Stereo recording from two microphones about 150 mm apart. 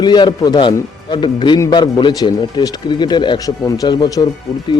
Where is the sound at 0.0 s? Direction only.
30° left (ahead or behind).